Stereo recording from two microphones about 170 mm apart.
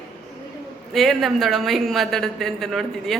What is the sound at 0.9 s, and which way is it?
A woman's voice, centre (ahead or behind).